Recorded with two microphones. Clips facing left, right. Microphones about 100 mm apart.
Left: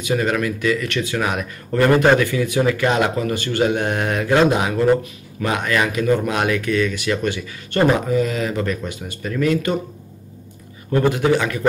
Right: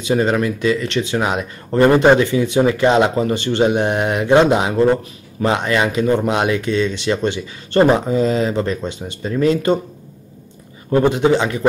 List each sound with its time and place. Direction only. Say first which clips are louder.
0.0 s speech: right 3 dB; 30° right (ahead or behind)
10.9 s speech: right 3 dB; 25° right (ahead or behind)